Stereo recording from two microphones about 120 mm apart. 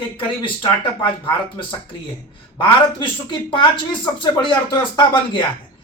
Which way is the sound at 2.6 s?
45° left (ahead or behind).